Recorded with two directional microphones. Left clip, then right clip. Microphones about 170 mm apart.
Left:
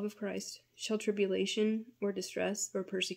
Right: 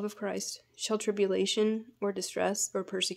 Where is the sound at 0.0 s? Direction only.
5° left (ahead or behind).